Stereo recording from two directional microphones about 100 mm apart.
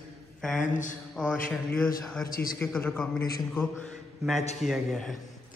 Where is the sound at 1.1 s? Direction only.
10° left (ahead or behind).